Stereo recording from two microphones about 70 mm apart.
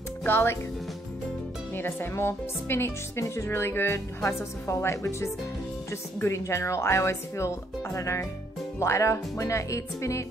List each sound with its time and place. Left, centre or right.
0.2 s speech: left
1.8 s speech: left